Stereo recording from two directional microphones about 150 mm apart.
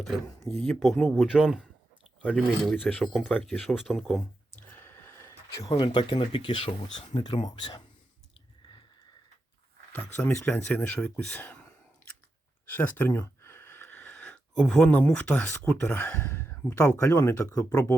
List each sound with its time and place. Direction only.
0.4 s speech: centre (ahead or behind)
4.8 s a sound: 15° left (ahead or behind)
5.7 s speech: 35° left (ahead or behind)
9.9 s speech: 10° left (ahead or behind)